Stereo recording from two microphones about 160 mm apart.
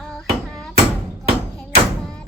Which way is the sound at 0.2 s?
5° left (ahead or behind).